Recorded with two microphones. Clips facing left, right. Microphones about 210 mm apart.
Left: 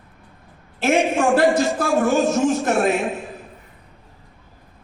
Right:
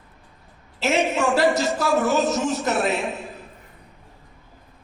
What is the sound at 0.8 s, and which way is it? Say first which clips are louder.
A man's voice: left 3 dB; 50° left (ahead or behind).